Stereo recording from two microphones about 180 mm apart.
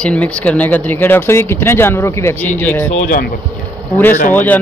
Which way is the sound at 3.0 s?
60° left (ahead or behind).